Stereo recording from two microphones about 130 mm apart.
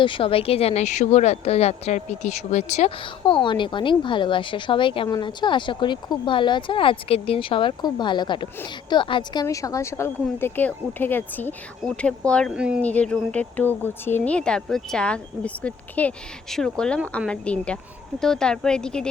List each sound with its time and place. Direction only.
0.0 s speech: 40° left (ahead or behind); by 2.9 s 60° left (ahead or behind)
3.0 s speech: 40° left (ahead or behind); by 12.5 s 5° left (ahead or behind)
12.5 s speech: 10° right (ahead or behind)
12.8 s speech: 10° left (ahead or behind)